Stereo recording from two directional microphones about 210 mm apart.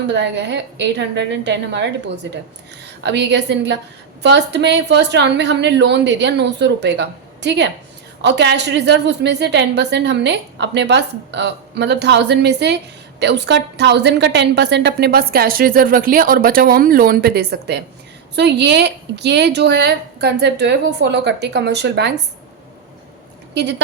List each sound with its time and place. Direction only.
0.1 s a woman's voice: 55° right (ahead or behind)
23.6 s a woman's voice: 55° right (ahead or behind)